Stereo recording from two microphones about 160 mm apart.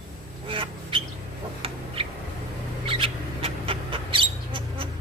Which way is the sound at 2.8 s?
35° right (ahead or behind).